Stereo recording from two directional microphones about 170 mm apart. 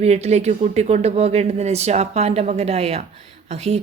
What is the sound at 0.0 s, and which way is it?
A woman's voice, 40° right (ahead or behind).